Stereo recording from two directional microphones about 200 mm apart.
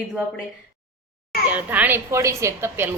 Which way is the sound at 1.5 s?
10° right (ahead or behind).